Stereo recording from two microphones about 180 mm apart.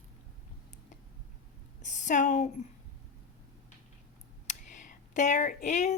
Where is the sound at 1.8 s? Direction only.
45° left (ahead or behind).